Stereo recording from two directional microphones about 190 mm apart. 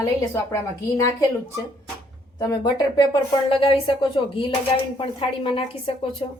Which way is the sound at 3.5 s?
30° left (ahead or behind).